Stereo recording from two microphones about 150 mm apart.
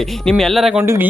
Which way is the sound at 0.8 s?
15° right (ahead or behind).